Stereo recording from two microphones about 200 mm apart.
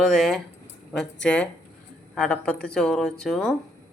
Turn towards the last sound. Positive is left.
turn(degrees=0)  # may be behind; listen again after turning